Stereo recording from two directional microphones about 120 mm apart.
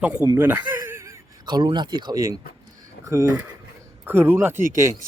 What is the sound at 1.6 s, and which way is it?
Speech, 35° right (ahead or behind).